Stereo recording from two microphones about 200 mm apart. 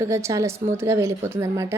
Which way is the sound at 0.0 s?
15° right (ahead or behind).